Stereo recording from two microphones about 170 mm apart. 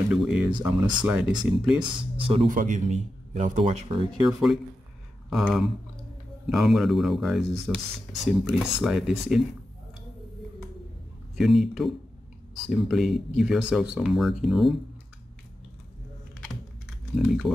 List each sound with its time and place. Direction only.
0.1 s speech: 5° right (ahead or behind)
0.5 s speech: 25° right (ahead or behind)
1.0 s speech: 5° right (ahead or behind)
1.8 s speech: 30° right (ahead or behind)
2.5 s a man's voice: 50° right (ahead or behind)
3.6 s speech: 30° right (ahead or behind)
4.3 s speech: 5° right (ahead or behind)
11.3 s speech: centre (ahead or behind)
17.2 s speech: centre (ahead or behind)